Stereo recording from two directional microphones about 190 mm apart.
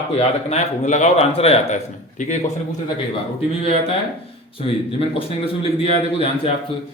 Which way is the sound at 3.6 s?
30° left (ahead or behind).